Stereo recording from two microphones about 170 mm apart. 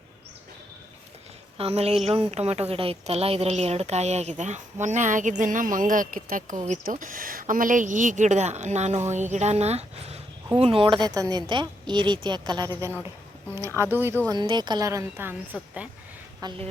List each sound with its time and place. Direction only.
1.5 s a woman's voice: 35° right (ahead or behind); by 14.2 s 15° right (ahead or behind)
14.3 s a woman's voice: 25° right (ahead or behind); by 15.9 s 5° right (ahead or behind)
16.4 s a woman's voice: 25° right (ahead or behind)